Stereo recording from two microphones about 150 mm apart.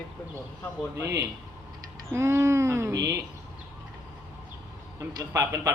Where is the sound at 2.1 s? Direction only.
20° right (ahead or behind).